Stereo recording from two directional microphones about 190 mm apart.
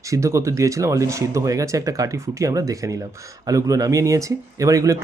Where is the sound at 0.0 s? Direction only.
15° right (ahead or behind).